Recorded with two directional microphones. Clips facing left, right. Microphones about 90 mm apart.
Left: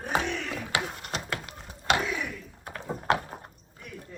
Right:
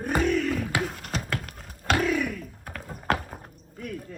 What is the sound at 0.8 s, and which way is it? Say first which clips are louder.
Clip-clop: right 3 dB; centre (ahead or behind).